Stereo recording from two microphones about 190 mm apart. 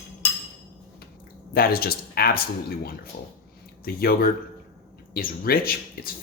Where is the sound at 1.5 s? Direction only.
50° left (ahead or behind).